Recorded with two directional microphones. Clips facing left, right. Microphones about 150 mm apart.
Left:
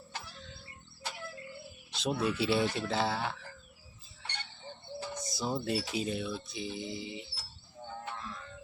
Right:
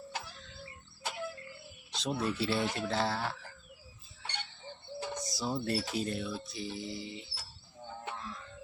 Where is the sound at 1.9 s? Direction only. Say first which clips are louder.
Left 2 dB; centre (ahead or behind).